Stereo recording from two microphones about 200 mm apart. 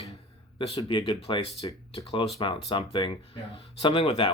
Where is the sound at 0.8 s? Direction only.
25° left (ahead or behind).